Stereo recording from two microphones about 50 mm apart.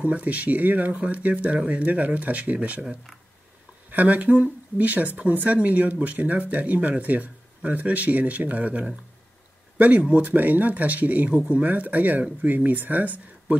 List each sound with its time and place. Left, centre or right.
0.0 s speech: right
3.9 s speech: right
11.6 s speech: right